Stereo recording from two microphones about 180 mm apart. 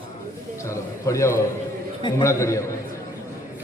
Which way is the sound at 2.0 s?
25° left (ahead or behind).